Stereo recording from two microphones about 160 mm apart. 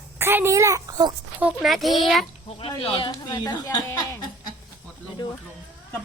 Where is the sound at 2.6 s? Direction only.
35° left (ahead or behind); by 4.2 s 20° left (ahead or behind).